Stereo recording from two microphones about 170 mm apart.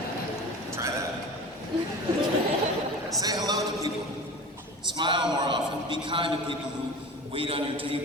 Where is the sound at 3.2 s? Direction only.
20° right (ahead or behind).